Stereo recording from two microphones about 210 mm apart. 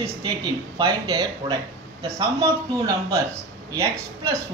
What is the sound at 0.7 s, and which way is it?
Speech, 20° right (ahead or behind).